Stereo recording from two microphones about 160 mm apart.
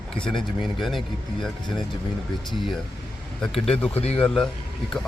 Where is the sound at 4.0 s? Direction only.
40° left (ahead or behind).